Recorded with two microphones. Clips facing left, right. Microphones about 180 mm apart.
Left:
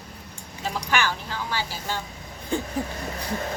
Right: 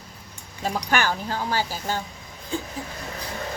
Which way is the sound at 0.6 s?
45° right (ahead or behind).